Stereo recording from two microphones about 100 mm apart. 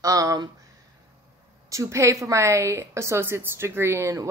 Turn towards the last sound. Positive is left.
turn(degrees=-30)  # may be behind; listen again after turning